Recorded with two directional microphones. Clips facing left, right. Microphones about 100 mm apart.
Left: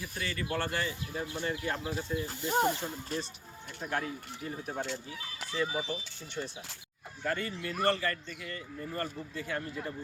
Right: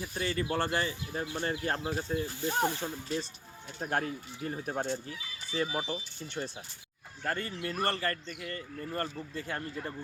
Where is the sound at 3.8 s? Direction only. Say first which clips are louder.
Right 2 dB; 45° right (ahead or behind).